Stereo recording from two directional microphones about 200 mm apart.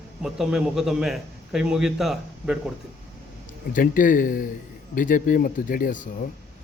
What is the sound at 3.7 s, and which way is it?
Speech, 45° left (ahead or behind).